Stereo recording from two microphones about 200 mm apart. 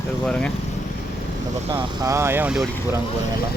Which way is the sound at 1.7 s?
15° right (ahead or behind).